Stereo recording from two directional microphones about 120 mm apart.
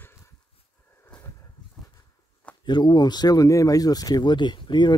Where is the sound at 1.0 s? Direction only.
20° left (ahead or behind).